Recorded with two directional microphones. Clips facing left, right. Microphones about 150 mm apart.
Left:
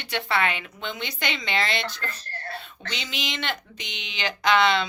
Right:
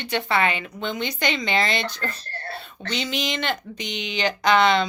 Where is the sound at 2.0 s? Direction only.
35° right (ahead or behind).